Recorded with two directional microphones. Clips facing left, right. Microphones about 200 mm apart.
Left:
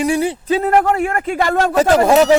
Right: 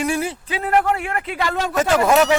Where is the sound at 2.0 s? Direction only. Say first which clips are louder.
Left 3 dB; 30° left (ahead or behind).